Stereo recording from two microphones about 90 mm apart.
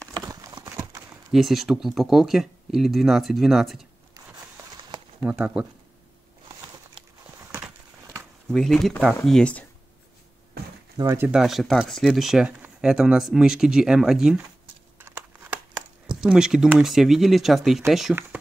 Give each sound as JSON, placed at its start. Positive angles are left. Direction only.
{"t": 0.3, "sound": "horse", "side_deg": -40}
{"t": 1.3, "sound": "speech", "side_deg": 0}
{"t": 5.2, "sound": "speech", "side_deg": -10}
{"t": 8.5, "sound": "speech", "side_deg": 5}
{"t": 11.1, "sound": "speech", "side_deg": -25}
{"t": 11.3, "sound": "speech", "side_deg": -5}
{"t": 15.0, "sound": "crumpling", "side_deg": -20}
{"t": 16.2, "sound": "speech", "side_deg": -5}